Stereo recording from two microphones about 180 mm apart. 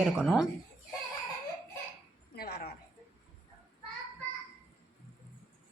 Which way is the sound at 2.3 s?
60° left (ahead or behind).